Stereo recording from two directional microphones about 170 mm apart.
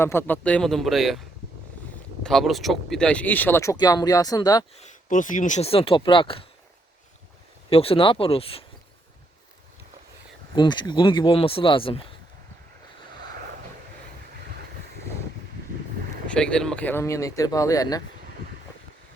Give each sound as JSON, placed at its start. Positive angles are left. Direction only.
{"t": 0.0, "sound": "speech", "side_deg": 15}
{"t": 2.2, "sound": "speech", "side_deg": 0}
{"t": 4.8, "sound": "speech", "side_deg": 45}
{"t": 7.7, "sound": "speech", "side_deg": 35}
{"t": 10.5, "sound": "speech", "side_deg": 25}
{"t": 16.2, "sound": "speech", "side_deg": 5}